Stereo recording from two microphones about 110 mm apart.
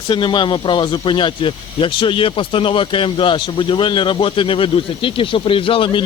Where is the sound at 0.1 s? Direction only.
45° left (ahead or behind).